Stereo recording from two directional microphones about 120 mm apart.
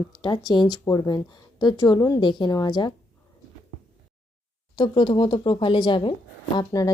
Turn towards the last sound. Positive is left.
turn(degrees=30)  # may be behind; listen again after turning